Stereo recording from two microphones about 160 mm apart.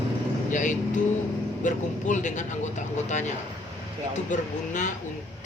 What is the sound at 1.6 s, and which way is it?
Speech, 50° left (ahead or behind).